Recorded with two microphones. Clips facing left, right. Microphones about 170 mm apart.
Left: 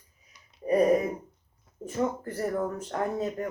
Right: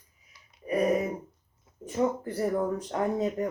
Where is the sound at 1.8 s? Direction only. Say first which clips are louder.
Right 2 dB; 15° right (ahead or behind).